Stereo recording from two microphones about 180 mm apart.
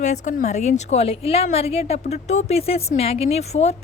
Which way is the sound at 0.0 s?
40° left (ahead or behind).